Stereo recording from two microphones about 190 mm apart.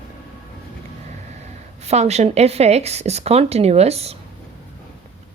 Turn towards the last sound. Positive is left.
turn(degrees=-35)  # may be behind; listen again after turning